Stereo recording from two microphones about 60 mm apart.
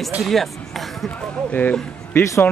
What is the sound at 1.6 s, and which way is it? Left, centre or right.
Speech, left.